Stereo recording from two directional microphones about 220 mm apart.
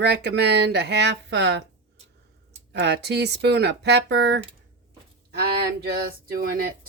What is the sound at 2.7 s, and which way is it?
Speech, 50° right (ahead or behind).